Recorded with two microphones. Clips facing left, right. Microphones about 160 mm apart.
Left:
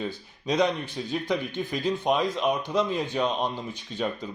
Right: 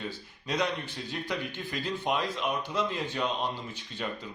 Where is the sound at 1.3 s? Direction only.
15° left (ahead or behind).